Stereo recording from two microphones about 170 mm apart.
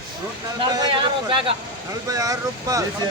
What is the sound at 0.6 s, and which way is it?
Speech, 25° right (ahead or behind).